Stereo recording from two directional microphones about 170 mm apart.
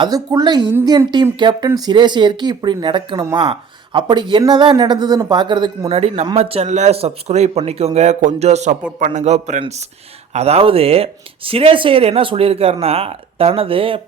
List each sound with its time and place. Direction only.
0.0 s a man's voice: 25° right (ahead or behind)